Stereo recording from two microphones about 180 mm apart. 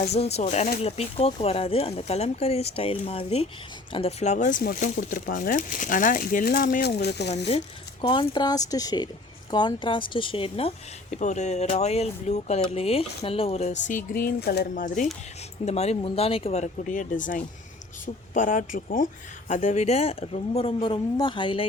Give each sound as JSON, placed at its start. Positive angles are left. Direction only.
{"t": 0.0, "sound": "speech", "side_deg": 35}
{"t": 7.3, "sound": "speech", "side_deg": 35}